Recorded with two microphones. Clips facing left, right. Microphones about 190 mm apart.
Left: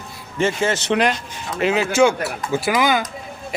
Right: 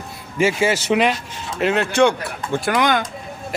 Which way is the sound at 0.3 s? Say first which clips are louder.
Right 2 dB; 10° right (ahead or behind).